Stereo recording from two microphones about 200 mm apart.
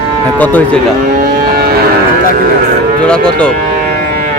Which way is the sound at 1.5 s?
50° right (ahead or behind).